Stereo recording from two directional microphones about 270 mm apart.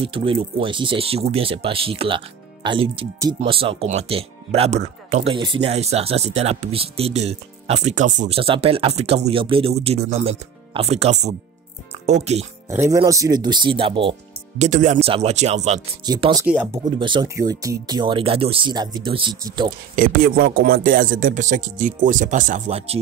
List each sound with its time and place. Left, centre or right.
0.0 s speech: centre
12.6 s speech: centre
16.4 s speech: centre
17.0 s speech: centre
20.0 s speech: right